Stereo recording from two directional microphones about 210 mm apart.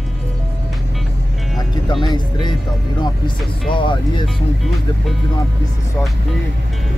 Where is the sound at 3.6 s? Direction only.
25° left (ahead or behind).